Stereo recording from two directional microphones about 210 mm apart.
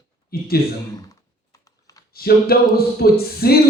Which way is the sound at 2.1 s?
45° left (ahead or behind).